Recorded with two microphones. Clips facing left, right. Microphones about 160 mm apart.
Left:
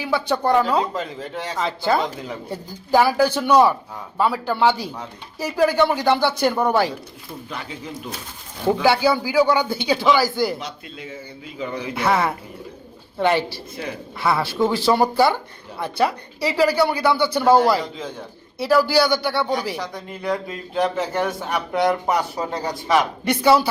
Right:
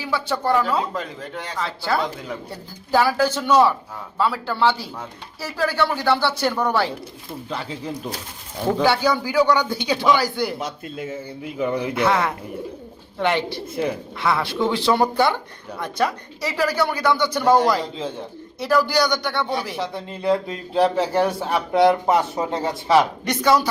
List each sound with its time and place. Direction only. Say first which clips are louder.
0.0 s speech: left 3 dB; 15° left (ahead or behind)
8.8 s speech: left 1 dB; 10° left (ahead or behind)
10.6 s speech: right 5 dB; 50° right (ahead or behind)
12.0 s speech: left 3 dB; 5° left (ahead or behind)
19.7 s speech: right 2 dB; 25° right (ahead or behind)
23.2 s speech: left 2 dB; 10° left (ahead or behind)